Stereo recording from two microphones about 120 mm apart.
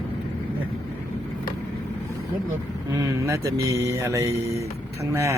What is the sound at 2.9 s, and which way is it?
Speech, 25° right (ahead or behind).